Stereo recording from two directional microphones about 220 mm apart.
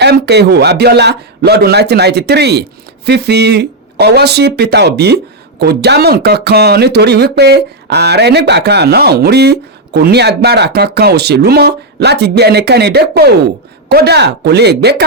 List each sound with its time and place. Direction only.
0.0 s speech: 50° right (ahead or behind)